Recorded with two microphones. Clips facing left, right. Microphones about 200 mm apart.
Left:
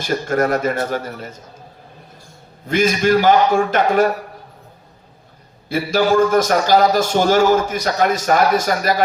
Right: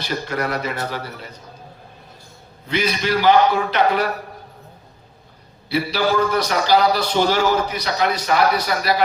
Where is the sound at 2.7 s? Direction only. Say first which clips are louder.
Left 6 dB; 45° left (ahead or behind).